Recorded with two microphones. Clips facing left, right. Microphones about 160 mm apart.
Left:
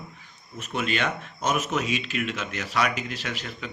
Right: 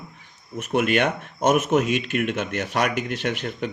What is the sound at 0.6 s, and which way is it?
A man's voice, 60° right (ahead or behind).